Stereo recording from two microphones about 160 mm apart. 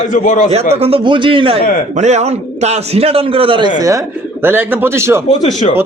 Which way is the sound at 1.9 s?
45° right (ahead or behind).